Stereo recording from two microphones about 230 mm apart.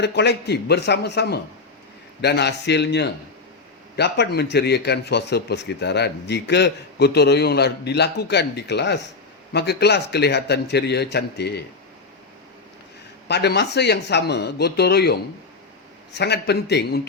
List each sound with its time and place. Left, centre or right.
0.0 s a man's voice: left
13.2 s a man's voice: left